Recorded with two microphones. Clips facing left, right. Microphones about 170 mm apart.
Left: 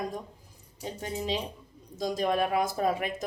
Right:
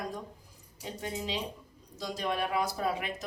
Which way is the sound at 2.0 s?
45° left (ahead or behind).